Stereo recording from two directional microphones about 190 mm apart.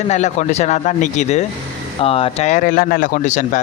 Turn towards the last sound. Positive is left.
turn(degrees=40)  # may be behind; listen again after turning